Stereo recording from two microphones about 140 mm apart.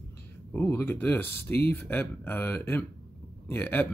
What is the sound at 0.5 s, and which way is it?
Speech, 15° left (ahead or behind).